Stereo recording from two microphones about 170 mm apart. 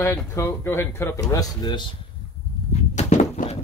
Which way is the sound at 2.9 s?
45° left (ahead or behind).